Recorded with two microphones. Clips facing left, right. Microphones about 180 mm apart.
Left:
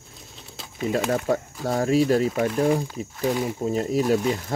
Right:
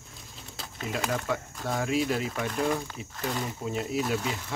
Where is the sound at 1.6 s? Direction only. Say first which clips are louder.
Left 7 dB; 40° left (ahead or behind).